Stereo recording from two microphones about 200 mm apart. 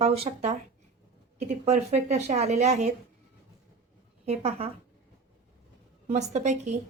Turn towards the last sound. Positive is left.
turn(degrees=-35)  # may be behind; listen again after turning